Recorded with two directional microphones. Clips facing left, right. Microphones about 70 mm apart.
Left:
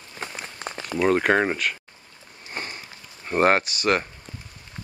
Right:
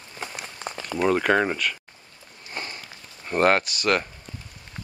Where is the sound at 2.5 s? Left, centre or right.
Centre.